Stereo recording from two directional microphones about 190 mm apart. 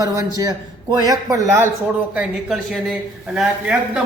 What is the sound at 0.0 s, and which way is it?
A man's voice, 20° right (ahead or behind).